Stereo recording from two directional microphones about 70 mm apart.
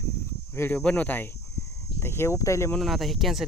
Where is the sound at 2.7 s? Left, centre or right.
Centre.